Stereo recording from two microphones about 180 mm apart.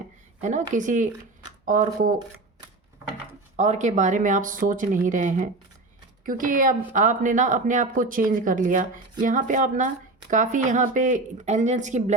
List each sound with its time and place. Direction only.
0.7 s speech: 45° right (ahead or behind)
3.6 s speech: 40° right (ahead or behind)